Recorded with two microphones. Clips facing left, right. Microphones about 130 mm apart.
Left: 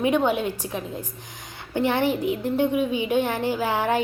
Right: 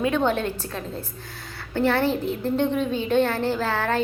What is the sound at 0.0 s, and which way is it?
A woman's voice, 15° left (ahead or behind).